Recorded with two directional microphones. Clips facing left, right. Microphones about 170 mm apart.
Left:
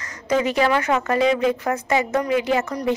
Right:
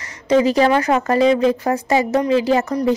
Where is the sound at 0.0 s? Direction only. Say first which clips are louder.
Right 6 dB; 30° right (ahead or behind).